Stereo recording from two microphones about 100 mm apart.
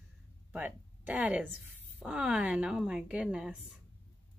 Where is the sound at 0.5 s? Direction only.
15° right (ahead or behind).